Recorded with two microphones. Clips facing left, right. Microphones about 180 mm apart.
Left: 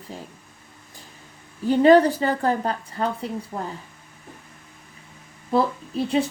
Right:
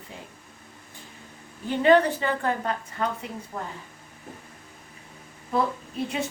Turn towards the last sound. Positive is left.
turn(degrees=30)  # may be behind; listen again after turning